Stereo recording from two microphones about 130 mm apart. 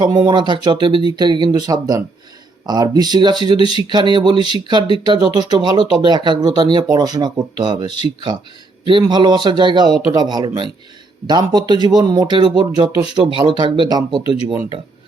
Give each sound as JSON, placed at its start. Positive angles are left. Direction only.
{"t": 0.0, "sound": "speech", "side_deg": -35}